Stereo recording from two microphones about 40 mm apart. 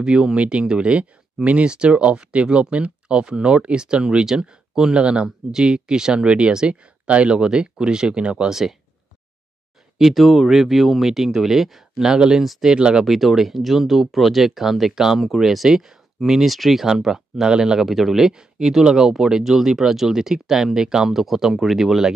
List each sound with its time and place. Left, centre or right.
0.0 s speech: right
7.3 s speech: right
8.5 s speech: centre
9.9 s speech: centre
12.4 s speech: centre
12.7 s speech: right
13.0 s speech: centre
16.8 s speech: centre
17.8 s speech: centre